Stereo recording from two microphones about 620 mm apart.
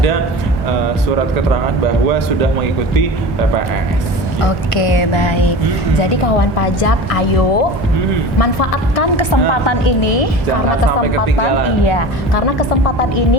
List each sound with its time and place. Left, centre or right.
4.4 s speech: left
6.0 s a woman's voice: left
9.3 s speech: left
10.0 s a woman's voice: left
11.9 s speech: left